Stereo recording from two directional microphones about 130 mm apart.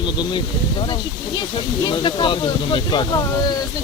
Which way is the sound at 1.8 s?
35° left (ahead or behind).